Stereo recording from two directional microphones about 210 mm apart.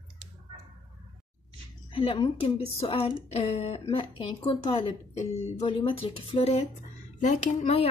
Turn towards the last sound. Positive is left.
turn(degrees=30)  # may be behind; listen again after turning